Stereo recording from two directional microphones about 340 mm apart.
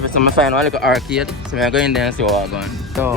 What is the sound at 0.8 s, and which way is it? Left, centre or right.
Speech, centre.